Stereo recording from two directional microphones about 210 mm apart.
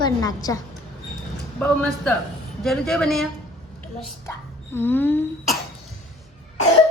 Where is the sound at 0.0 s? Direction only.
15° left (ahead or behind); by 3.2 s centre (ahead or behind).